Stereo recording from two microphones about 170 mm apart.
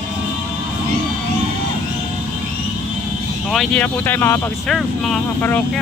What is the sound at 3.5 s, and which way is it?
Speech, 5° left (ahead or behind).